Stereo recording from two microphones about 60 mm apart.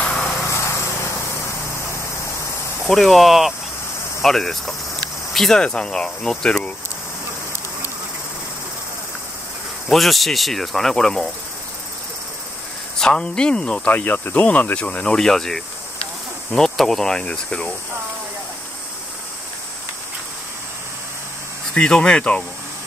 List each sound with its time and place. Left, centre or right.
0.0 s lawn mower: centre
0.4 s lawn mower: left
2.9 s speech: centre
9.8 s speech: centre
13.0 s speech: centre
15.1 s speech: centre
17.2 s speech: centre
21.7 s speech: centre